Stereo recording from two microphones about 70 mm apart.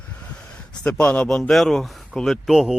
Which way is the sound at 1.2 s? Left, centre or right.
Centre.